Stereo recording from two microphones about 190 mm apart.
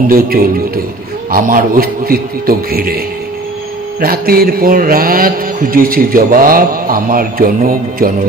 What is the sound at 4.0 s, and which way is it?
Speech, 50° right (ahead or behind).